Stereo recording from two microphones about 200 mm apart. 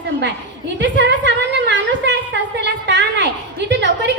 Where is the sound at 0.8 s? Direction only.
60° right (ahead or behind).